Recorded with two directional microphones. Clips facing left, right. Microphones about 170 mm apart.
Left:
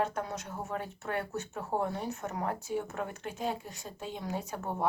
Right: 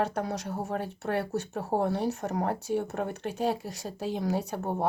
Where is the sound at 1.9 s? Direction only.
75° right (ahead or behind).